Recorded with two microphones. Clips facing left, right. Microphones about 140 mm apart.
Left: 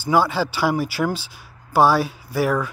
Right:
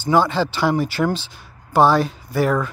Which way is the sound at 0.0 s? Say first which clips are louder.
Right 2 dB; 10° left (ahead or behind).